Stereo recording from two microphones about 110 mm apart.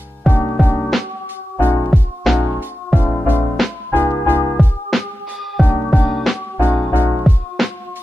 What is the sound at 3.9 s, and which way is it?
Music, 20° left (ahead or behind).